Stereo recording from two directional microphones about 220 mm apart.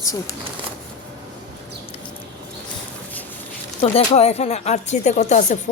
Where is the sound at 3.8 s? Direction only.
30° left (ahead or behind).